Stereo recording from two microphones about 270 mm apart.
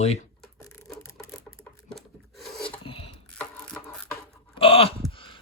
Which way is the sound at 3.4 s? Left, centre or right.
Centre.